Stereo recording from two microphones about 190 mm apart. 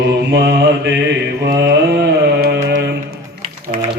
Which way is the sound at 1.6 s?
60° right (ahead or behind).